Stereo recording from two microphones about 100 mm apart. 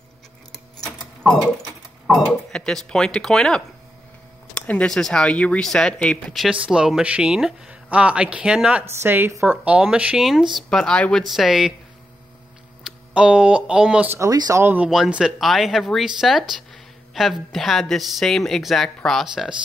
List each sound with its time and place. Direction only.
1.2 s sewing machine: 5° left (ahead or behind)
2.5 s speech: 5° left (ahead or behind)
6.5 s speech: 10° right (ahead or behind)
8.9 s a woman's voice: 20° right (ahead or behind); by 11.2 s 10° left (ahead or behind)
11.2 s speech: centre (ahead or behind)
13.1 s speech: 10° right (ahead or behind)
14.1 s speech: 35° right (ahead or behind)
14.6 s a woman's voice: 20° right (ahead or behind)
14.9 s speech: 5° right (ahead or behind)